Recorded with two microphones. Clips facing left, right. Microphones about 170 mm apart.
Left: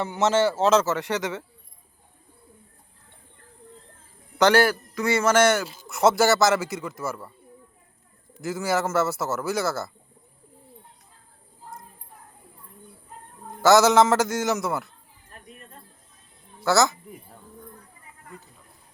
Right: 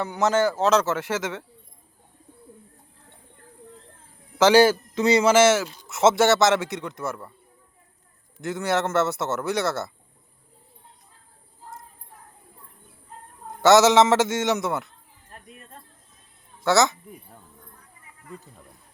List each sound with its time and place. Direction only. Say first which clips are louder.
0.0 s speech: even; 5° left (ahead or behind)
4.5 s a man's voice: right 4 dB; 20° right (ahead or behind)
5.3 s speech: right 2 dB; 5° right (ahead or behind)
8.4 s speech: right 1 dB; centre (ahead or behind)
13.6 s speech: right 1 dB; centre (ahead or behind)
16.6 s speech: right 1 dB; centre (ahead or behind)